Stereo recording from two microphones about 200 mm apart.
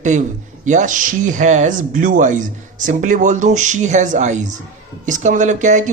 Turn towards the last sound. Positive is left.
turn(degrees=-40)  # may be behind; listen again after turning